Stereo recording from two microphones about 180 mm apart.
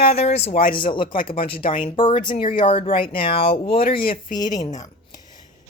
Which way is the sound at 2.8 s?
50° left (ahead or behind).